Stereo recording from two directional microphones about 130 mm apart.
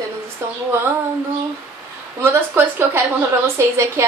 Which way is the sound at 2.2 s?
20° right (ahead or behind).